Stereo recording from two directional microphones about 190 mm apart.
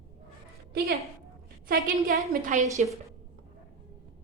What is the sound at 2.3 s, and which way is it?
Speech, 40° right (ahead or behind).